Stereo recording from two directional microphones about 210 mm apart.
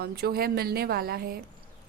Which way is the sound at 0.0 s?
45° right (ahead or behind).